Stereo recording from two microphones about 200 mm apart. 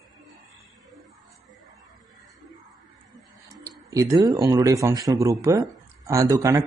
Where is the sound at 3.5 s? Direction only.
15° right (ahead or behind).